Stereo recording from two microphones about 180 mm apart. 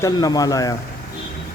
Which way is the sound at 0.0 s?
20° left (ahead or behind).